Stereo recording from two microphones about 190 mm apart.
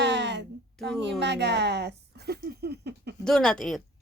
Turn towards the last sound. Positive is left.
turn(degrees=5)  # may be behind; listen again after turning